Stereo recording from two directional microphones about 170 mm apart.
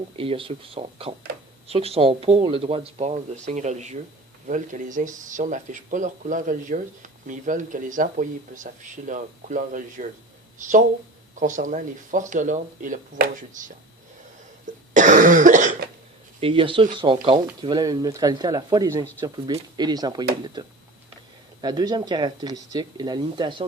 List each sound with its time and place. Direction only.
0.2 s speech: 30° right (ahead or behind); by 13.7 s 50° right (ahead or behind)
14.9 s cough: 50° right (ahead or behind)
16.4 s speech: 30° right (ahead or behind)